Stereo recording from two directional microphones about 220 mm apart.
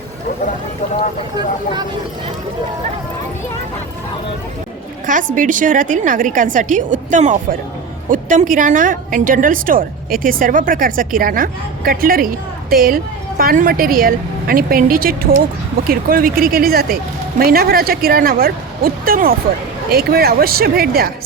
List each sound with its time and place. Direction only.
5.0 s a woman's voice: 35° right (ahead or behind)